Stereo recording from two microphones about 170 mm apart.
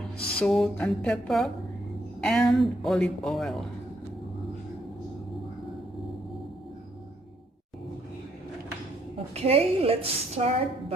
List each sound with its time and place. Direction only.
0.3 s speech: 5° left (ahead or behind)
9.3 s a woman's voice: 35° right (ahead or behind)